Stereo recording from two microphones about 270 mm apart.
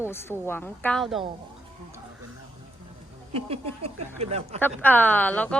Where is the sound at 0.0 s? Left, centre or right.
Centre.